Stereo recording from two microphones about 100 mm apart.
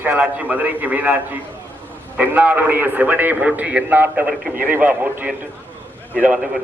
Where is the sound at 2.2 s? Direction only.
15° right (ahead or behind).